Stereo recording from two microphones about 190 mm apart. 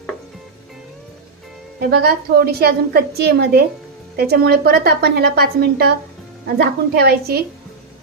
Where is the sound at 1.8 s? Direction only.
55° right (ahead or behind).